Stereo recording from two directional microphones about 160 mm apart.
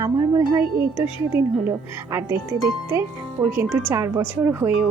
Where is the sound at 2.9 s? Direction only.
15° right (ahead or behind).